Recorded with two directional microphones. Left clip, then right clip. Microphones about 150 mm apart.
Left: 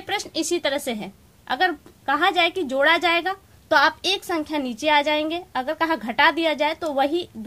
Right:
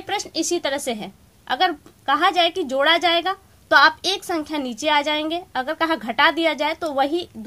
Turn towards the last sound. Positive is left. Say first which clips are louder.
# right 1 dB
turn(degrees=-30)  # may be behind; listen again after turning